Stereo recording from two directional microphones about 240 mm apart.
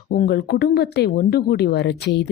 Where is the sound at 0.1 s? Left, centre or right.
Left.